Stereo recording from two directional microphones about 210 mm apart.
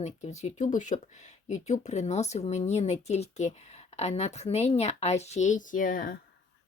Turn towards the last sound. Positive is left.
turn(degrees=40)  # may be behind; listen again after turning